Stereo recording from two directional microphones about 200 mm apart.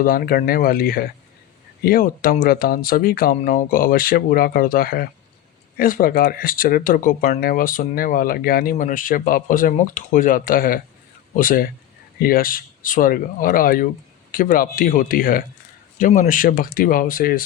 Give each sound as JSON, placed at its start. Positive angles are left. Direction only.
{"t": 0.0, "sound": "speech", "side_deg": 45}